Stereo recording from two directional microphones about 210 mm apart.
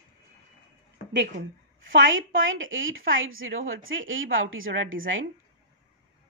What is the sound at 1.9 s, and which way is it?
A woman's voice, 65° right (ahead or behind).